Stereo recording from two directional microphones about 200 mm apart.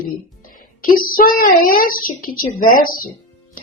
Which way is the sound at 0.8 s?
45° left (ahead or behind).